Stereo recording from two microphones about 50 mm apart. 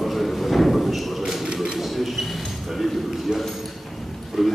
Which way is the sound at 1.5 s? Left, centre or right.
Centre.